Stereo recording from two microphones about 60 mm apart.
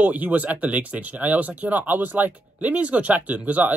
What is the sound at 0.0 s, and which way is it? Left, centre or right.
Speech, right.